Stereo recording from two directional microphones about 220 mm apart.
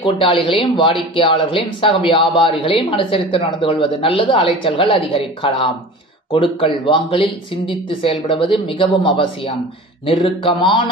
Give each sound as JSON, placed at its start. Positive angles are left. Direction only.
{"t": 0.0, "sound": "speech", "side_deg": 25}